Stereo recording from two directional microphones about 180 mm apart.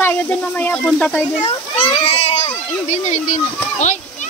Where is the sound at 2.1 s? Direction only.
35° left (ahead or behind).